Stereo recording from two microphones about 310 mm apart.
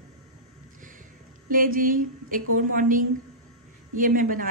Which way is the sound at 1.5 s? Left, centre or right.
Right.